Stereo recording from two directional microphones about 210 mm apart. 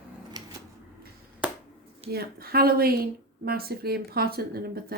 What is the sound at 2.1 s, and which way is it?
Speech, 45° right (ahead or behind).